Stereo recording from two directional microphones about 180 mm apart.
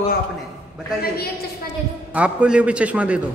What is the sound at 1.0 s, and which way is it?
Speech, 60° left (ahead or behind).